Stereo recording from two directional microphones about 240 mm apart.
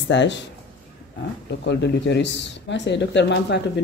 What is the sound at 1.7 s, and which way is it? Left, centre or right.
Speech, left.